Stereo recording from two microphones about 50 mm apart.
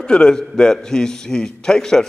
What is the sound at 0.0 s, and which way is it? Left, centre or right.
A man's voice, centre.